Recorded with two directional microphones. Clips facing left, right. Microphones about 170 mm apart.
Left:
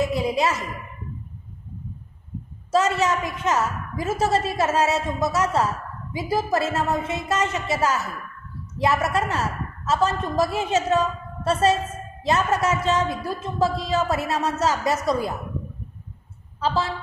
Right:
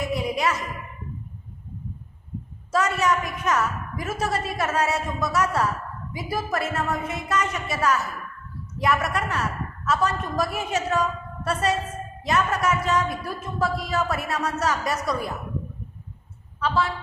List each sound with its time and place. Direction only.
0.1 s a sound: 30° left (ahead or behind)
2.7 s a woman's voice: 25° left (ahead or behind)
16.5 s speech: 30° left (ahead or behind)